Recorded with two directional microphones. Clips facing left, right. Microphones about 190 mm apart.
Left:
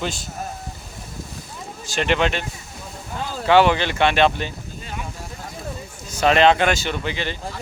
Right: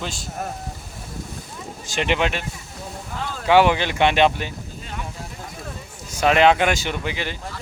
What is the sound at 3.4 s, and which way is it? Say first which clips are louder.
Speech: even; 10° right (ahead or behind).